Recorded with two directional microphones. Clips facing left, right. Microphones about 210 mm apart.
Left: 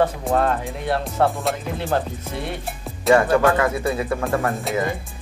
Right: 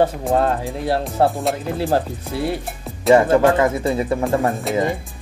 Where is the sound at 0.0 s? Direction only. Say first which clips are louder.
Right 2 dB; 30° right (ahead or behind).